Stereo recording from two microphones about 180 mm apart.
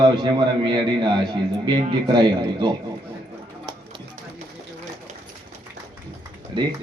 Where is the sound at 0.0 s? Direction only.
25° right (ahead or behind).